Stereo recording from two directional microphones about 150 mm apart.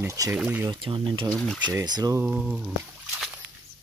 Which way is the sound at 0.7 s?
35° right (ahead or behind).